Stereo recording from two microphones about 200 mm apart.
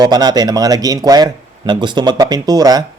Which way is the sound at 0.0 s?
20° right (ahead or behind).